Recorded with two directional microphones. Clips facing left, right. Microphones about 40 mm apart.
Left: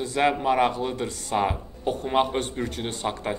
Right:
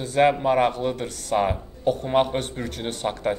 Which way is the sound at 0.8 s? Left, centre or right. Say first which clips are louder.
Right 2 dB; left.